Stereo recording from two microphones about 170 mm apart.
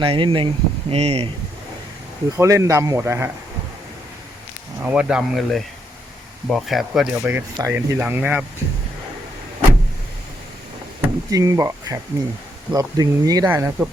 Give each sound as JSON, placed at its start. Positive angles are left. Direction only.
{"t": 0.0, "sound": "speech", "side_deg": -30}
{"t": 2.4, "sound": "speech", "side_deg": -15}
{"t": 4.8, "sound": "speech", "side_deg": -5}
{"t": 11.0, "sound": "speech", "side_deg": -20}